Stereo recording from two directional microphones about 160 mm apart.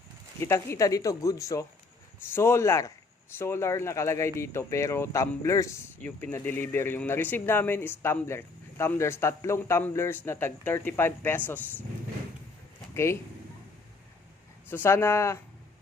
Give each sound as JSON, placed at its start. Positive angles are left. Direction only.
{"t": 0.3, "sound": "speech", "side_deg": 15}
{"t": 12.9, "sound": "speech", "side_deg": 15}
{"t": 14.7, "sound": "speech", "side_deg": 15}